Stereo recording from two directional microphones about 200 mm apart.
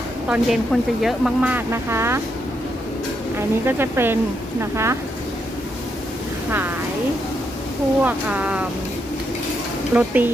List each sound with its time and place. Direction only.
0.3 s speech: centre (ahead or behind)
3.3 s speech: 10° right (ahead or behind)
8.0 s speech: 5° right (ahead or behind)
9.9 s speech: 10° right (ahead or behind)